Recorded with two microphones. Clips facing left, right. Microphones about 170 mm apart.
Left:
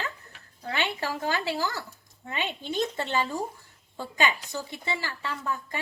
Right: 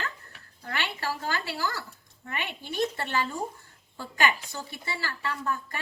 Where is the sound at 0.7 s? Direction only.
20° left (ahead or behind).